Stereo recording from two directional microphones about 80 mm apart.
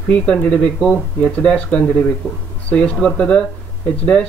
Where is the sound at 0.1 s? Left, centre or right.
Centre.